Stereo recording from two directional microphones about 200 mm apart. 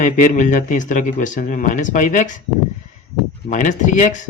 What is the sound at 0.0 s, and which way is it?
Speech, 40° left (ahead or behind).